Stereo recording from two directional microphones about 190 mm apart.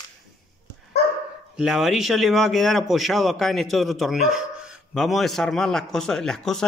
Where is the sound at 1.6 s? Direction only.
Centre (ahead or behind).